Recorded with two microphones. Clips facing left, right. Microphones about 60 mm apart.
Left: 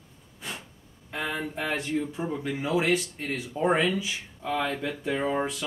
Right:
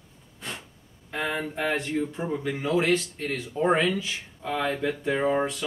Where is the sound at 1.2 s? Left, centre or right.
Centre.